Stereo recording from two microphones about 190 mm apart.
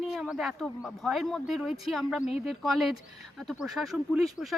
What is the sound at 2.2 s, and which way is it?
Speech, 35° left (ahead or behind).